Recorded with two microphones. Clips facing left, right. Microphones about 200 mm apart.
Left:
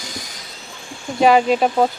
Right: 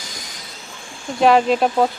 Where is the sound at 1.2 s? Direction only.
Centre (ahead or behind).